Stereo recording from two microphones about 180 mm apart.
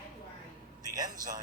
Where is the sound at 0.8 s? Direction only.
20° right (ahead or behind).